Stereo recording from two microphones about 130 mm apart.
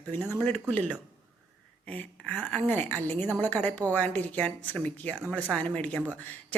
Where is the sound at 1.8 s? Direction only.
10° left (ahead or behind).